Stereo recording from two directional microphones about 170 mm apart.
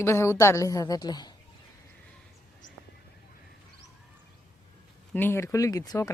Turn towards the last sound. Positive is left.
turn(degrees=20)  # may be behind; listen again after turning